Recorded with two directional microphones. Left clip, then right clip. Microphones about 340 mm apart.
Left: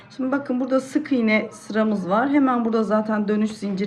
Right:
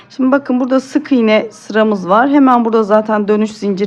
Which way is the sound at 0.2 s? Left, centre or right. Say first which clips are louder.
Right 11 dB; centre.